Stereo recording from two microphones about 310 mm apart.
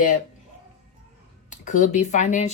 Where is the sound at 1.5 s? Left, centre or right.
Left.